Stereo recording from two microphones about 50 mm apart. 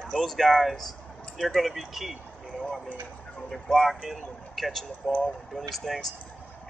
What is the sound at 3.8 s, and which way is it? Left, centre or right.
Speech, centre.